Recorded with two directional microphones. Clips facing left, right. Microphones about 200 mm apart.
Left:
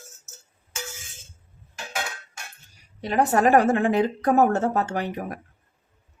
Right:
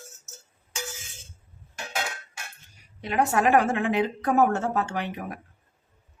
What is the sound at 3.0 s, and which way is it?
A woman's voice, 35° left (ahead or behind).